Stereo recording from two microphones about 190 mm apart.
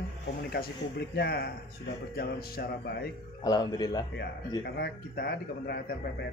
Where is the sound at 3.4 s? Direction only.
20° left (ahead or behind).